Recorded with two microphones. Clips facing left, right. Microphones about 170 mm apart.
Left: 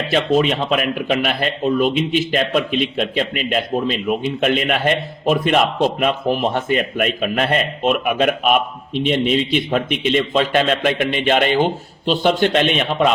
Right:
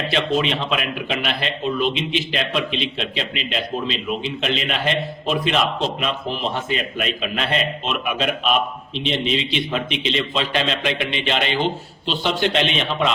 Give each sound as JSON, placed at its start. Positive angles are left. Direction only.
{"t": 0.1, "sound": "a man's voice", "side_deg": 45}